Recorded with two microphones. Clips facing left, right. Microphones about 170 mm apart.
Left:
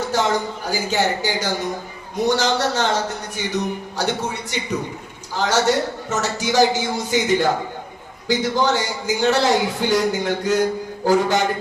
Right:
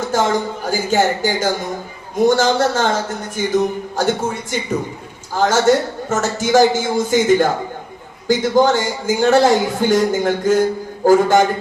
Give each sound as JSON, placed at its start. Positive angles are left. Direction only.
{"t": 0.1, "sound": "a man's voice", "side_deg": -50}